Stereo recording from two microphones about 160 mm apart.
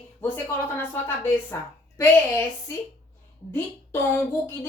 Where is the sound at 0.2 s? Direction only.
15° left (ahead or behind).